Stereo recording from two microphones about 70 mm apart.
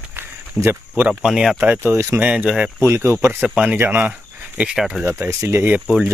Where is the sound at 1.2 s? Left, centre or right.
Centre.